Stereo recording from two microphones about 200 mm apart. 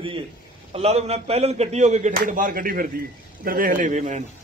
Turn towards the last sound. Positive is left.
turn(degrees=-40)  # may be behind; listen again after turning